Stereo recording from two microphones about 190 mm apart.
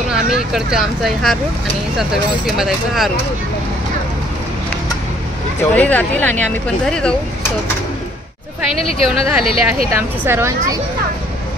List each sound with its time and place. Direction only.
0.1 s speech: centre (ahead or behind)
2.5 s speech: centre (ahead or behind)
5.6 s speech: 10° left (ahead or behind)
8.9 s speech: 30° left (ahead or behind)
9.8 s speech: 10° right (ahead or behind)